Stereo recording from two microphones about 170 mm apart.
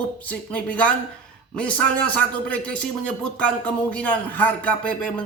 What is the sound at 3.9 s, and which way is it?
A man's voice, 10° left (ahead or behind).